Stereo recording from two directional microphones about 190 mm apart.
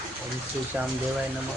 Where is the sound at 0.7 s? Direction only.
10° right (ahead or behind).